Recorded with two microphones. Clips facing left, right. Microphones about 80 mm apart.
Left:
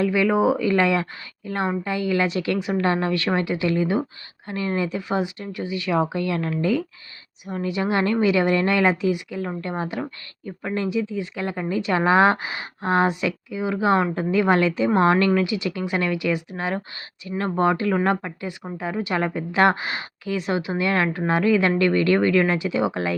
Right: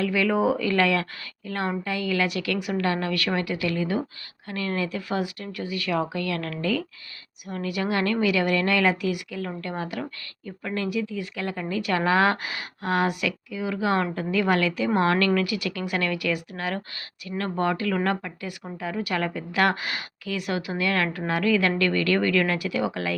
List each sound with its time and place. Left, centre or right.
0.0 s speech: left